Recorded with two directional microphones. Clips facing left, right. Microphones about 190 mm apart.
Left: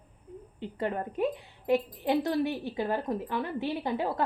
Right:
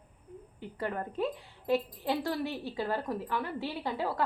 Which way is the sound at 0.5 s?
25° left (ahead or behind).